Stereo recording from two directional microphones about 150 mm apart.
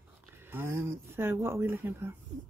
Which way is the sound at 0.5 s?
15° right (ahead or behind).